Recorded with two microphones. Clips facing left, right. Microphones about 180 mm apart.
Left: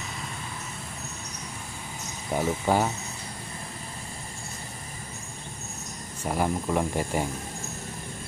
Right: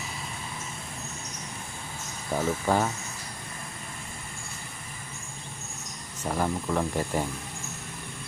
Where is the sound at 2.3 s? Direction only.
15° left (ahead or behind).